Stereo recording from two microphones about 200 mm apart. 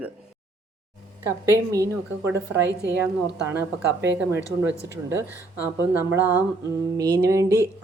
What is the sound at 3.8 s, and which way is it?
Speech, 65° right (ahead or behind).